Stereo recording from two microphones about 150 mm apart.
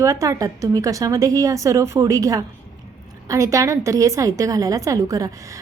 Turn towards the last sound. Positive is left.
turn(degrees=-25)  # may be behind; listen again after turning